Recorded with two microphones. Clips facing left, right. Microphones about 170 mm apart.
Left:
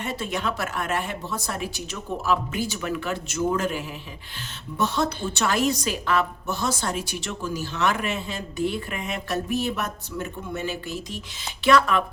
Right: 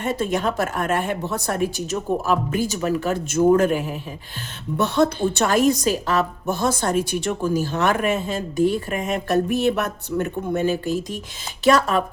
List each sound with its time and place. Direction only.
0.0 s a woman's voice: 50° right (ahead or behind)